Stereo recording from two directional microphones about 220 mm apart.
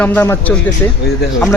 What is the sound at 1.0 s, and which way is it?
Speech, 45° left (ahead or behind).